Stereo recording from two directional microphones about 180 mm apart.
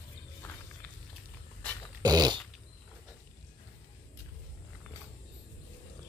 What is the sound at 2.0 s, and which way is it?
Dog, 20° right (ahead or behind).